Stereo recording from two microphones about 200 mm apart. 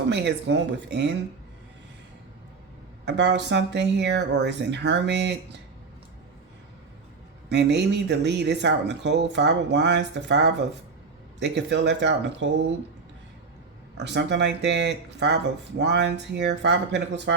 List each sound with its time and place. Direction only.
0.1 s speech: 60° right (ahead or behind)
3.1 s speech: 60° right (ahead or behind)
7.5 s speech: 60° right (ahead or behind)
13.9 s speech: 60° right (ahead or behind)